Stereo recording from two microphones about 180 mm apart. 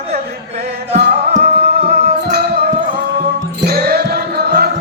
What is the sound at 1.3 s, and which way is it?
Music, 35° right (ahead or behind).